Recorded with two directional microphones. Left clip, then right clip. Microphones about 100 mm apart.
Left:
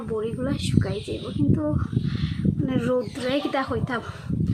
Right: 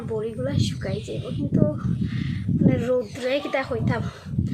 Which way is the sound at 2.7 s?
30° left (ahead or behind).